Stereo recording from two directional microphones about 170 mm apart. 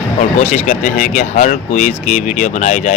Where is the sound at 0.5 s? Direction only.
50° left (ahead or behind).